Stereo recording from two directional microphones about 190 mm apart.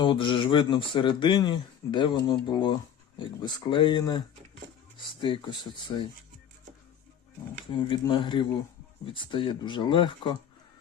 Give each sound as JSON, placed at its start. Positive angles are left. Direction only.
{"t": 0.0, "sound": "speech", "side_deg": 25}
{"t": 5.2, "sound": "speech", "side_deg": 25}
{"t": 7.7, "sound": "speech", "side_deg": 25}